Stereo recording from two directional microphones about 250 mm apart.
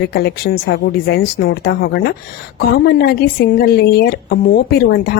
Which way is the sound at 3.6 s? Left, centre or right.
Left.